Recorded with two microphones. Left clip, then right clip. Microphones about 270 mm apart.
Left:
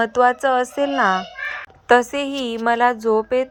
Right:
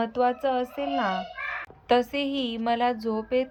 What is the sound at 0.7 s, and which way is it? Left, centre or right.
Speech, left.